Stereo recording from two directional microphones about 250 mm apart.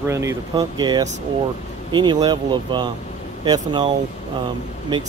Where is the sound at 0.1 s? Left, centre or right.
Centre.